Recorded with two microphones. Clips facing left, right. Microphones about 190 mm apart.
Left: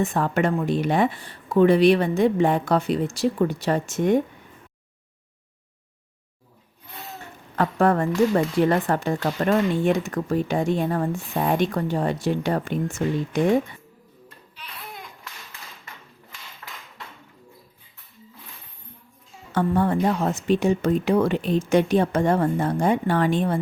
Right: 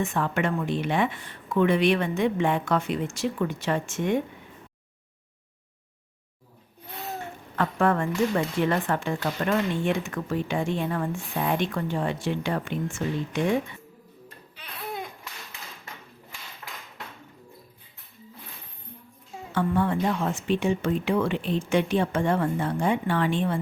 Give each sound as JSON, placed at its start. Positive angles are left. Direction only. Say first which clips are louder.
{"t": 0.0, "sound": "speech", "louder": "left 4 dB", "side_deg": 40}
{"t": 7.5, "sound": "speech", "louder": "left 4 dB", "side_deg": 40}
{"t": 16.6, "sound": "hammer", "louder": "even", "side_deg": -15}
{"t": 19.5, "sound": "speech", "louder": "left 3 dB", "side_deg": 40}